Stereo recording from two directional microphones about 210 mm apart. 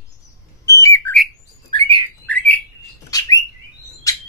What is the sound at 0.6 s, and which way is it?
Bird, 15° left (ahead or behind).